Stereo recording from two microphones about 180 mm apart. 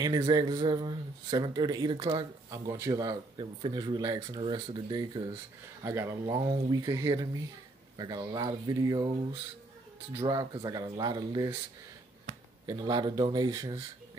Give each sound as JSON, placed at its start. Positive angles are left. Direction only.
{"t": 0.0, "sound": "speech", "side_deg": -25}
{"t": 12.6, "sound": "speech", "side_deg": -25}